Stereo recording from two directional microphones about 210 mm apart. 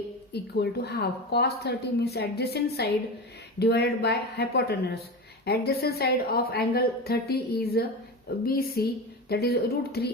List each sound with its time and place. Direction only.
0.3 s a woman's voice: 50° left (ahead or behind)